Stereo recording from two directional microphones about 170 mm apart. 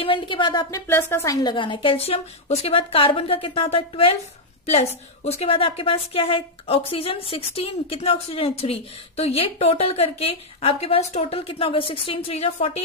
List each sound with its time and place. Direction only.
0.0 s speech: 30° left (ahead or behind)
0.8 s a woman's voice: 15° left (ahead or behind); by 12.8 s 35° left (ahead or behind)